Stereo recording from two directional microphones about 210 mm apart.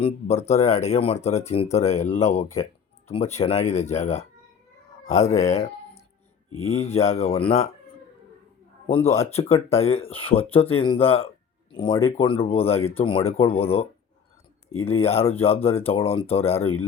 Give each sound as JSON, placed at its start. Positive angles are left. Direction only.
{"t": 0.0, "sound": "speech", "side_deg": 30}
{"t": 9.2, "sound": "speech", "side_deg": 30}